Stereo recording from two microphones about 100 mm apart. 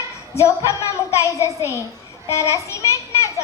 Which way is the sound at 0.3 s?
30° left (ahead or behind).